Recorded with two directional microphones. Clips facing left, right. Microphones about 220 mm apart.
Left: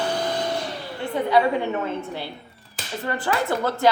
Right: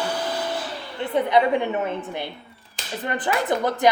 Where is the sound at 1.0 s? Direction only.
20° right (ahead or behind).